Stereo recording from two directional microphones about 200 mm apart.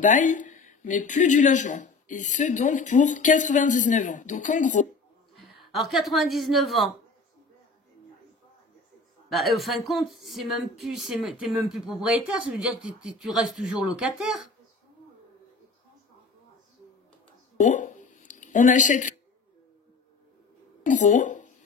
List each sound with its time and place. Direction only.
0.0 s speech: 40° left (ahead or behind)
5.6 s a woman's voice: centre (ahead or behind)
9.3 s a woman's voice: centre (ahead or behind)
17.6 s a sound: 40° left (ahead or behind)
20.8 s speech: 40° left (ahead or behind)